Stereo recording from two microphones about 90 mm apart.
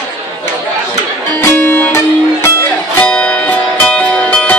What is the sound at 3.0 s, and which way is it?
Music, 10° left (ahead or behind).